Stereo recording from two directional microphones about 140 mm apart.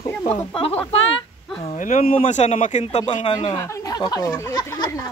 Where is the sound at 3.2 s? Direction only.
25° left (ahead or behind).